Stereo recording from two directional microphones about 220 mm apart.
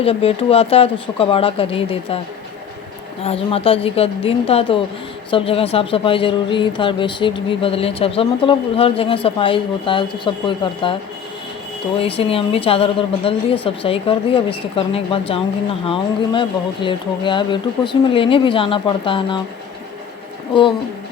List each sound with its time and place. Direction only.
0.0 s speech: 25° left (ahead or behind)
3.2 s speech: 25° left (ahead or behind)
11.9 s speech: 25° left (ahead or behind)
20.5 s speech: 20° left (ahead or behind)